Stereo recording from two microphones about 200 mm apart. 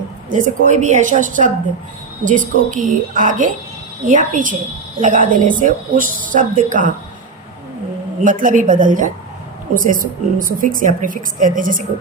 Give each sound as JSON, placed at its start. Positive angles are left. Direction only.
{"t": 0.3, "sound": "a woman's voice", "side_deg": -40}
{"t": 8.2, "sound": "a woman's voice", "side_deg": -40}